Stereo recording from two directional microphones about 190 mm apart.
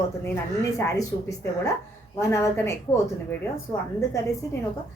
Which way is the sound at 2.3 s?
15° left (ahead or behind).